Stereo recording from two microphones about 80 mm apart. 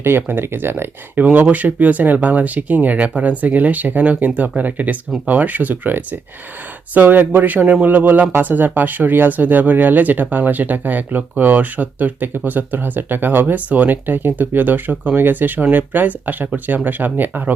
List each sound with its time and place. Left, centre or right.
0.0 s speech: right